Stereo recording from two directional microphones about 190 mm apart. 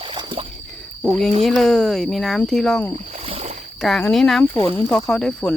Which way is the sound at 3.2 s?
30° right (ahead or behind).